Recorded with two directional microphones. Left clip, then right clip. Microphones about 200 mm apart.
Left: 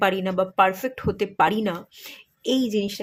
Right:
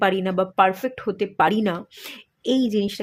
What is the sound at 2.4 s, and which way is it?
Speech, 10° right (ahead or behind).